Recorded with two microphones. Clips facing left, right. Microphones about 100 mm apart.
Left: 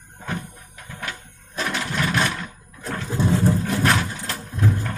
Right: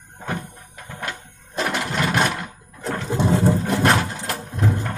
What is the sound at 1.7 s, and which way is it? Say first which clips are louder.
Engine: right 1 dB; 60° right (ahead or behind).